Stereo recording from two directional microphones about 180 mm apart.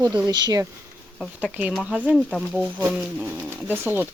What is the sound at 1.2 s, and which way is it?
Speech, 5° right (ahead or behind).